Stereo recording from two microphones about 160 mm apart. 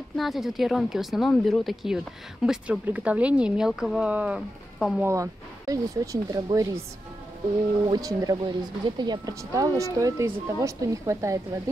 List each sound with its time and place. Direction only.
0.1 s speech: centre (ahead or behind)
5.0 s speech: 20° right (ahead or behind)
7.8 s speech: 25° right (ahead or behind)